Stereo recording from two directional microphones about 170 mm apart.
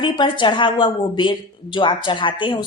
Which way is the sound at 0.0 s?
25° left (ahead or behind).